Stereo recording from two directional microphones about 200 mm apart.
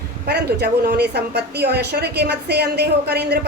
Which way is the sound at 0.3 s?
55° right (ahead or behind).